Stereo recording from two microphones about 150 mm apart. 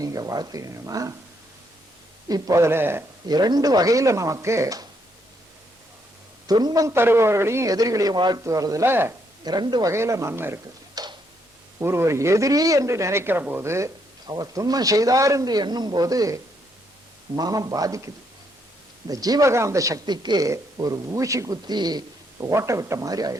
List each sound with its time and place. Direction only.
0.0 s a man's voice: 25° right (ahead or behind)
2.2 s speech: 20° right (ahead or behind)
3.2 s a man's voice: 25° right (ahead or behind)
6.5 s a man's voice: 25° right (ahead or behind)
9.4 s a man's voice: 30° right (ahead or behind)